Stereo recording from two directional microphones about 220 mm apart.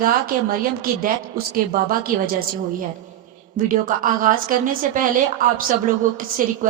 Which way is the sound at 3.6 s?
40° right (ahead or behind).